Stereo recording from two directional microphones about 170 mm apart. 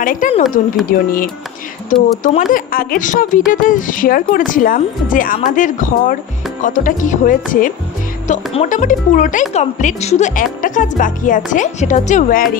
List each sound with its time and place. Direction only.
0.0 s speech: 55° left (ahead or behind)